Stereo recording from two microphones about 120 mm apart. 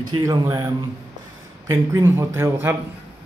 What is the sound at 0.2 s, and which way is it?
Speech, 35° right (ahead or behind).